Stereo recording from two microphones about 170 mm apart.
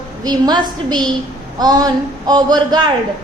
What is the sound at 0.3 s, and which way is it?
A woman's voice, 25° right (ahead or behind).